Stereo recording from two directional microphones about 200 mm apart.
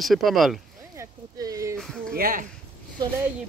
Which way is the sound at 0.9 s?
15° right (ahead or behind).